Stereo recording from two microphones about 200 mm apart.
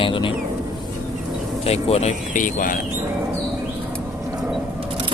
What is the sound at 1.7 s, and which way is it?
Speech, 30° left (ahead or behind).